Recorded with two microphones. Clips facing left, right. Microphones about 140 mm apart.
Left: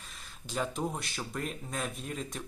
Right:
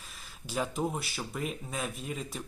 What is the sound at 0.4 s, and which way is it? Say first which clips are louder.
Speech: right 2 dB; 5° right (ahead or behind).